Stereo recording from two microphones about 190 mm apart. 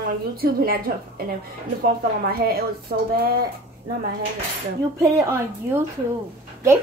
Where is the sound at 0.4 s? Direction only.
50° right (ahead or behind).